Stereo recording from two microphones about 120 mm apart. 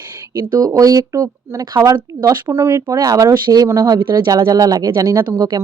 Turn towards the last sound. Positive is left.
turn(degrees=-30)  # may be behind; listen again after turning